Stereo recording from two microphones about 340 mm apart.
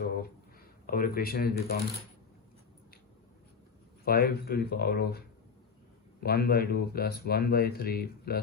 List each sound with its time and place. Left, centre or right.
0.9 s speech: left
4.0 s speech: left